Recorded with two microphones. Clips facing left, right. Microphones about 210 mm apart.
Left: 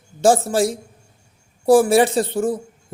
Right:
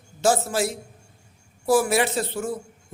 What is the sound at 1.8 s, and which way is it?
Speech, 30° left (ahead or behind).